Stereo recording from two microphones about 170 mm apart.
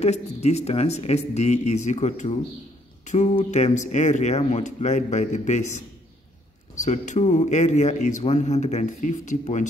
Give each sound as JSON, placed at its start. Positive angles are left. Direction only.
{"t": 0.0, "sound": "a man's voice", "side_deg": 40}
{"t": 6.7, "sound": "a man's voice", "side_deg": 45}